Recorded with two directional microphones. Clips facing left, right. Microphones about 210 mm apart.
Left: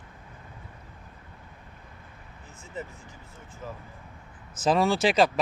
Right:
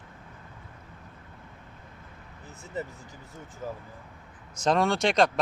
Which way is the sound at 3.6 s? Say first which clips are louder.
Right 3 dB; 45° right (ahead or behind).